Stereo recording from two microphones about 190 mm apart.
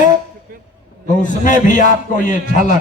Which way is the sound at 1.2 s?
40° left (ahead or behind).